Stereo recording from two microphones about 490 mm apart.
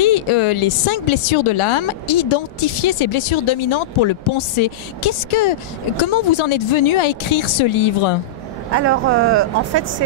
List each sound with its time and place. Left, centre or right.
0.0 s a woman's voice: left
8.7 s speech: right